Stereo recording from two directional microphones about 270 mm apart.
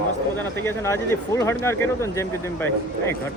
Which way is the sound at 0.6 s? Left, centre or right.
Centre.